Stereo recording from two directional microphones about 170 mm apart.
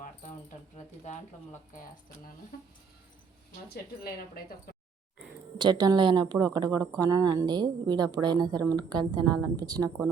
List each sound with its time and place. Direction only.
0.0 s a sound: 50° left (ahead or behind)
1.7 s speech: 50° left (ahead or behind)
4.0 s speech: 60° left (ahead or behind)
5.5 s speech: 25° right (ahead or behind)